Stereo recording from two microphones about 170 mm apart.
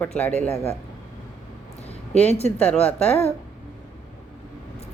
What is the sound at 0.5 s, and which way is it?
Speech, 35° left (ahead or behind).